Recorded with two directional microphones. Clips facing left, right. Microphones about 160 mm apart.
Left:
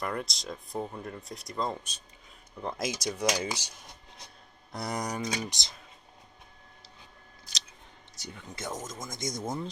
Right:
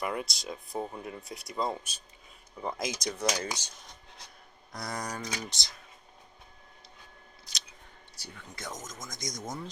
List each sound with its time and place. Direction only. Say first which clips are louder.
0.0 s speech: even; 5° right (ahead or behind); by 3.7 s 10° left (ahead or behind)
4.7 s speech: left 3 dB; 20° left (ahead or behind)
8.1 s speech: left 4 dB; 20° left (ahead or behind)